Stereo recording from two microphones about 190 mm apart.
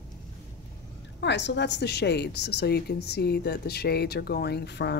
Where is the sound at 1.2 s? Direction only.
65° left (ahead or behind).